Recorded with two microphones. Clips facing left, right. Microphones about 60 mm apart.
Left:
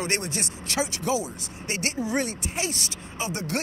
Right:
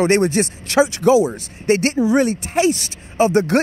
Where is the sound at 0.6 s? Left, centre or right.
Right.